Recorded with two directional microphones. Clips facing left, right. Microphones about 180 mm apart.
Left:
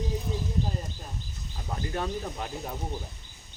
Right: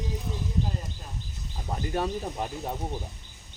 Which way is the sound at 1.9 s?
30° right (ahead or behind).